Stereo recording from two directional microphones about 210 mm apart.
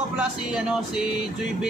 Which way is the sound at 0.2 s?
5° right (ahead or behind).